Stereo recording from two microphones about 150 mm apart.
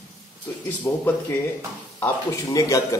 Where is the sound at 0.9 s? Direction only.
20° left (ahead or behind).